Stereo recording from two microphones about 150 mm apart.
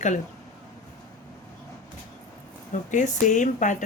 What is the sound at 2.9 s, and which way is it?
Speech, 55° left (ahead or behind).